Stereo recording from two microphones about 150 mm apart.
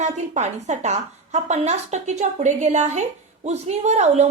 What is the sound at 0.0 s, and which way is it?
A woman's voice, 50° right (ahead or behind).